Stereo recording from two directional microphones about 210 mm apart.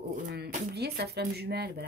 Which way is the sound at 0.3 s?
50° right (ahead or behind).